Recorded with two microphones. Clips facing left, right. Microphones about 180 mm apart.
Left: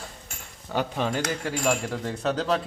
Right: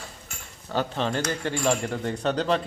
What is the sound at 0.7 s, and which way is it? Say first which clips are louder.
Speech: even; 10° left (ahead or behind).